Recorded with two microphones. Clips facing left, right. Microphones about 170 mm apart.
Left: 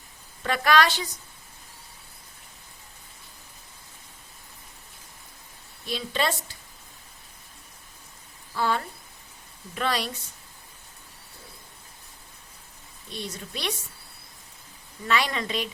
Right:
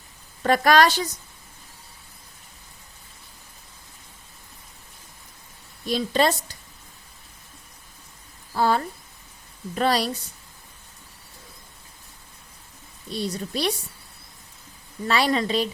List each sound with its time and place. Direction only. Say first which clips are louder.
0.4 s speech: right 4 dB; 40° right (ahead or behind)
5.8 s speech: right 6 dB; 40° right (ahead or behind)
8.5 s speech: right 5 dB; 40° right (ahead or behind)
13.1 s speech: right 8 dB; 35° right (ahead or behind)
15.0 s speech: right 5 dB; 35° right (ahead or behind)